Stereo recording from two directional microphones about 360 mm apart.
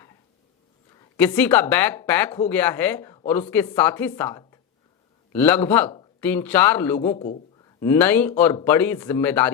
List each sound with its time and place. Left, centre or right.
1.1 s speech: centre
7.1 s a man's voice: centre